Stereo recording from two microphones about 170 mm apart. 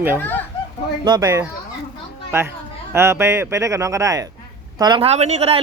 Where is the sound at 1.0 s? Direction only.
20° right (ahead or behind).